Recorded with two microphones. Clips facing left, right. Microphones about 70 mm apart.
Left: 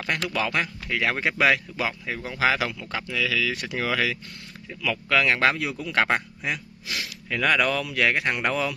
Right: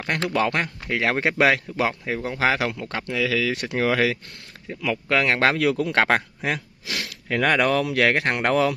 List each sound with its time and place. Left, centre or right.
0.0 s speech: right
4.6 s speech: right
5.6 s speech: right
5.9 s speech: right
7.2 s speech: right